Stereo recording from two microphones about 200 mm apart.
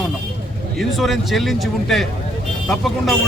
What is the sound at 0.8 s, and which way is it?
Speech, centre (ahead or behind).